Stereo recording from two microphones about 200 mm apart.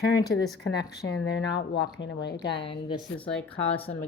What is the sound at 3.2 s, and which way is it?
Speech, 5° left (ahead or behind).